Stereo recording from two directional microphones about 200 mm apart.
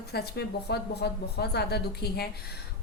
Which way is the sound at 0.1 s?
55° left (ahead or behind).